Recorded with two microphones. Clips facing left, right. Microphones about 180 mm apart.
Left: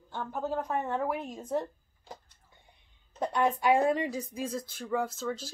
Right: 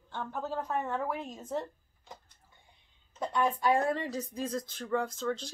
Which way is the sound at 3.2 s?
20° left (ahead or behind).